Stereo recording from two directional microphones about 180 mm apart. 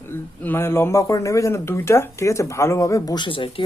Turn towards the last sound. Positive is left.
turn(degrees=30)  # may be behind; listen again after turning